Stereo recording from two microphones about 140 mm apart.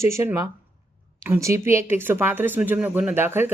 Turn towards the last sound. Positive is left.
turn(degrees=-15)  # may be behind; listen again after turning